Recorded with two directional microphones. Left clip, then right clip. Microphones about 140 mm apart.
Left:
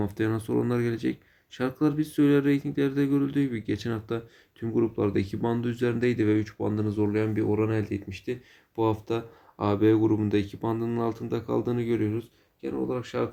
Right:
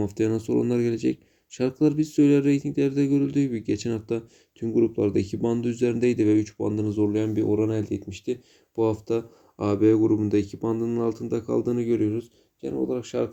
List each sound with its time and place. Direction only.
0.0 s speech: 25° right (ahead or behind)